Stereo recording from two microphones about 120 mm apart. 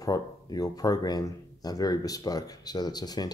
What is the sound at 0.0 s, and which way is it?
Speech, 30° left (ahead or behind).